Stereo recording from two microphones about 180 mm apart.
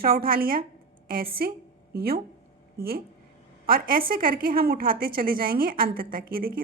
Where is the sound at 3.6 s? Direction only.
55° right (ahead or behind).